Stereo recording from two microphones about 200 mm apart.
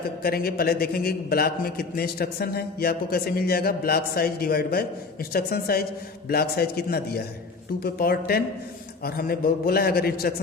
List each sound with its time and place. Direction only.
0.2 s a man's voice: 50° left (ahead or behind)